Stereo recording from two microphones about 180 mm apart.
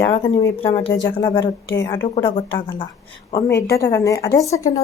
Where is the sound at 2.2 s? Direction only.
30° left (ahead or behind).